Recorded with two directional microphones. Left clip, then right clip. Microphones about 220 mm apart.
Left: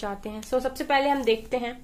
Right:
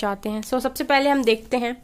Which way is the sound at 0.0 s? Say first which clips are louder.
Right 7 dB; 50° right (ahead or behind).